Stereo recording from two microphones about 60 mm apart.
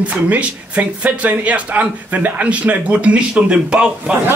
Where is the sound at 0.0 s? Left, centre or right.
Right.